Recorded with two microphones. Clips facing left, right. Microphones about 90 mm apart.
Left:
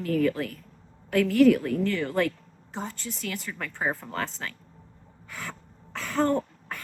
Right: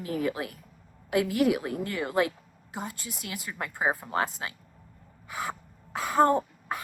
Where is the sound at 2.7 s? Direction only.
10° right (ahead or behind).